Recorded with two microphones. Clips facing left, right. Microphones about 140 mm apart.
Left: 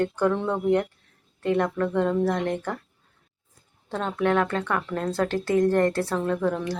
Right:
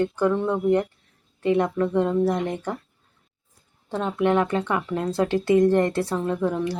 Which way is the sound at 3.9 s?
5° right (ahead or behind).